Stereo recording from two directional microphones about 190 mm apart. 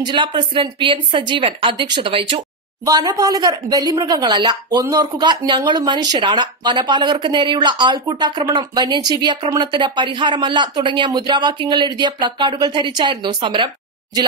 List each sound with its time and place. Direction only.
0.0 s a woman's voice: 25° right (ahead or behind)